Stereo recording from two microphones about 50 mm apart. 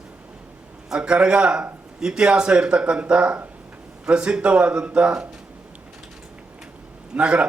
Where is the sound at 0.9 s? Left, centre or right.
Right.